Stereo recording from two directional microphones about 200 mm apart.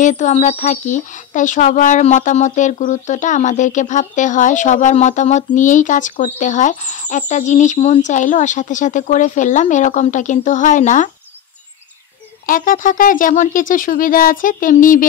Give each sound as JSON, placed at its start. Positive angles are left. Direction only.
{"t": 0.0, "sound": "speech", "side_deg": 40}
{"t": 12.4, "sound": "speech", "side_deg": 45}